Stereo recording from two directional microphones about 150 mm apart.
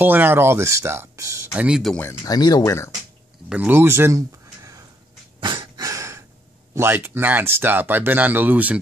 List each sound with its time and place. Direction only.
0.0 s speech: 10° right (ahead or behind)
1.7 s speech: centre (ahead or behind)
2.2 s speech: 25° left (ahead or behind)
3.4 s speech: 10° right (ahead or behind)
5.4 s a sound: 30° right (ahead or behind)
6.7 s speech: 15° right (ahead or behind)